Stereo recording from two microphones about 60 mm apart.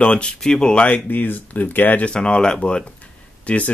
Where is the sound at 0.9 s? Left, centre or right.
Left.